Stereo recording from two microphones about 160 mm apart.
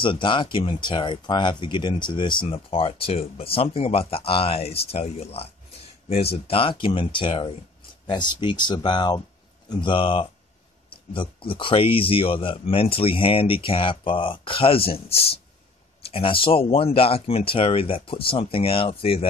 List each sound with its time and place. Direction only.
0.0 s speech: 30° left (ahead or behind)